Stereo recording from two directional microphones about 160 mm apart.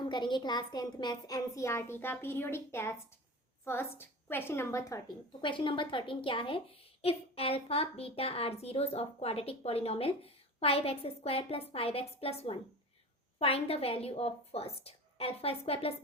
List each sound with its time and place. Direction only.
0.0 s a woman's voice: 30° left (ahead or behind)
5.4 s a woman's voice: 30° left (ahead or behind)